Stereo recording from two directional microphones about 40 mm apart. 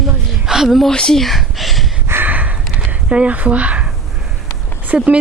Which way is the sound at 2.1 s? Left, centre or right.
Right.